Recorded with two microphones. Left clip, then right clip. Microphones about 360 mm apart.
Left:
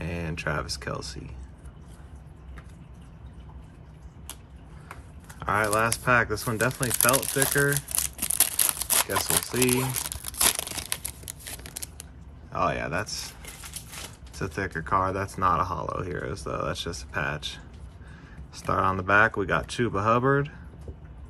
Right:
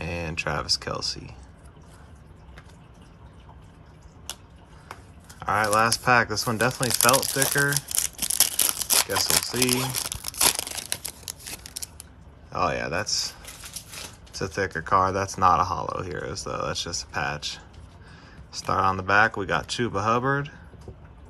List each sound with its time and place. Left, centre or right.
0.0 s speech: centre
4.3 s a sound: right
5.4 s speech: centre
12.5 s speech: centre
14.3 s speech: centre